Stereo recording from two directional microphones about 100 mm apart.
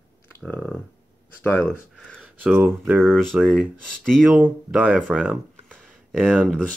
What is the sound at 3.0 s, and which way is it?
Speech, 5° left (ahead or behind).